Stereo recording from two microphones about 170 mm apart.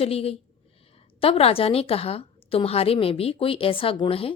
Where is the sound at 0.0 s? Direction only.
35° left (ahead or behind).